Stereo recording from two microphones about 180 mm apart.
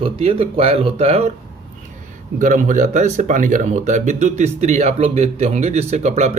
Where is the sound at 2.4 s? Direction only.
45° right (ahead or behind).